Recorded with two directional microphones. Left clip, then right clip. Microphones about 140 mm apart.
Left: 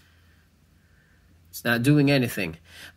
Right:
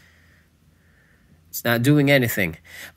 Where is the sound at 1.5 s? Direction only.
35° right (ahead or behind).